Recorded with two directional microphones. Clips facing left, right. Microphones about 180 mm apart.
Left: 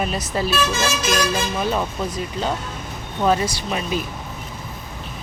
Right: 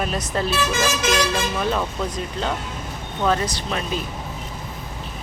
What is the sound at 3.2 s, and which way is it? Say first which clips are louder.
Speech: left 2 dB; 10° left (ahead or behind).